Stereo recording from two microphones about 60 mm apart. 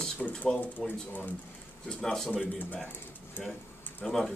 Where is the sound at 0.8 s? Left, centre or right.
Centre.